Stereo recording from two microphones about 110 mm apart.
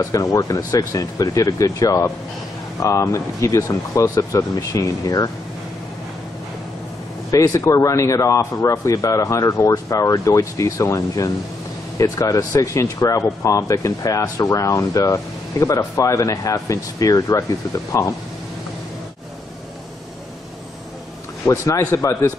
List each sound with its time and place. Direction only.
0.0 s speech: 30° left (ahead or behind)
7.2 s speech: 30° left (ahead or behind)
21.5 s speech: 25° left (ahead or behind)